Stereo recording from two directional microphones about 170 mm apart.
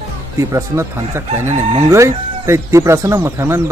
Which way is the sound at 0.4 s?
20° right (ahead or behind).